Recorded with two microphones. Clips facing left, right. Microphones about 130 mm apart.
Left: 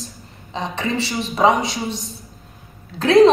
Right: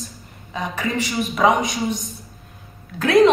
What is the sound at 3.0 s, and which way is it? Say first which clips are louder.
Speech: left 3 dB; 25° left (ahead or behind).